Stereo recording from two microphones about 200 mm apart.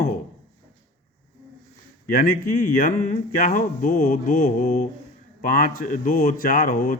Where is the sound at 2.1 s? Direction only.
45° left (ahead or behind).